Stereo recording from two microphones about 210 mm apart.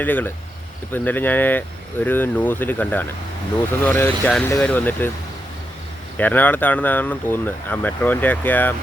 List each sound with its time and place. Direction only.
0.0 s speech: 10° left (ahead or behind)
6.1 s speech: 10° left (ahead or behind)